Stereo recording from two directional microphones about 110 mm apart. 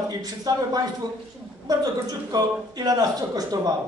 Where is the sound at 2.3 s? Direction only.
35° right (ahead or behind).